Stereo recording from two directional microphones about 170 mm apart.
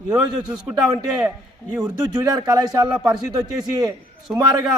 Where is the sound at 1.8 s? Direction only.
25° right (ahead or behind).